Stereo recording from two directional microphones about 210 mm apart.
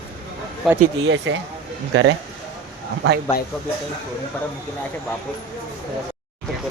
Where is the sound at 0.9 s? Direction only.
65° right (ahead or behind).